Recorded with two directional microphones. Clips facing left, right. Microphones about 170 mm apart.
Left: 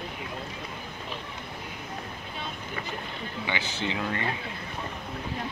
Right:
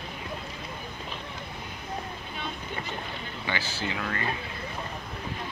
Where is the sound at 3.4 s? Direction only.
20° left (ahead or behind).